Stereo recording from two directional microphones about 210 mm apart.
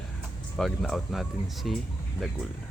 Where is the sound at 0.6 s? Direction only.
Centre (ahead or behind).